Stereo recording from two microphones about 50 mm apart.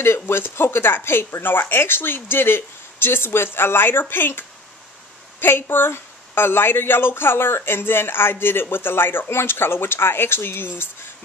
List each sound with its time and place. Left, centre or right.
0.0 s speech: left